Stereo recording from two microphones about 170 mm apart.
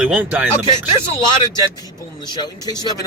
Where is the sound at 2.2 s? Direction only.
25° left (ahead or behind).